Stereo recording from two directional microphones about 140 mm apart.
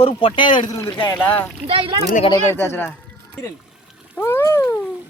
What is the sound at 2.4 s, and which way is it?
Speech, 15° left (ahead or behind).